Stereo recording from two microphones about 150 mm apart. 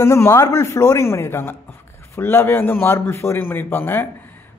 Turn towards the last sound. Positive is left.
turn(degrees=15)  # may be behind; listen again after turning